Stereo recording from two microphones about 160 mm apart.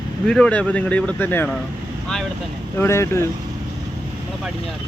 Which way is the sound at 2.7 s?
15° left (ahead or behind).